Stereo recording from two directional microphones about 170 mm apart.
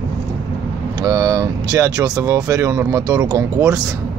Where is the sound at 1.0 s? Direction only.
25° right (ahead or behind).